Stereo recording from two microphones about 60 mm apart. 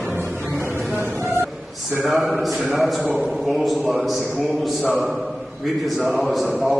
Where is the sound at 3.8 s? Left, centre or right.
Centre.